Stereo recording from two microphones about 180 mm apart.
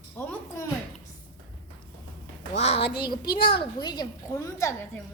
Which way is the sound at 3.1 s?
60° left (ahead or behind).